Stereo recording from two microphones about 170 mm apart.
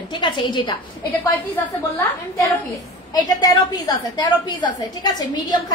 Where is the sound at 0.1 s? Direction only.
30° left (ahead or behind).